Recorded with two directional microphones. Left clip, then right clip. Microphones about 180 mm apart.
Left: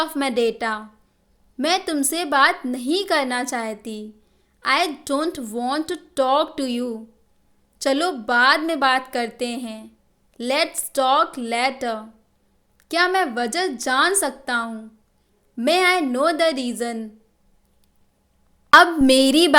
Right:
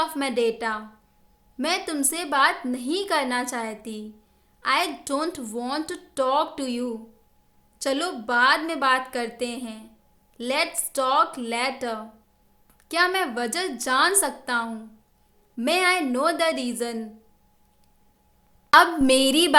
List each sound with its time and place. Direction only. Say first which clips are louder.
0.0 s a woman's voice: left 3 dB; 30° left (ahead or behind)
18.7 s a woman's voice: left 4 dB; 25° left (ahead or behind)